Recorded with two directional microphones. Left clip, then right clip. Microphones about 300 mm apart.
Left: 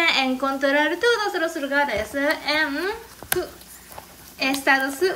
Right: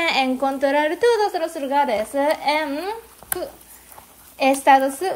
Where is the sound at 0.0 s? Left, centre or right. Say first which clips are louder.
Right 1 dB; centre.